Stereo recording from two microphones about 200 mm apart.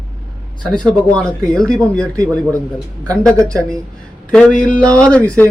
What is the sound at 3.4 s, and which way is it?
Speech, 15° right (ahead or behind).